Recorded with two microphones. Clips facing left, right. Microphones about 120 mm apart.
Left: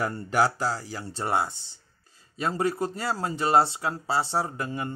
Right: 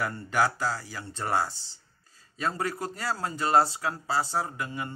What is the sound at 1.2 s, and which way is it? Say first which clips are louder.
Speech: left 1 dB; 20° left (ahead or behind).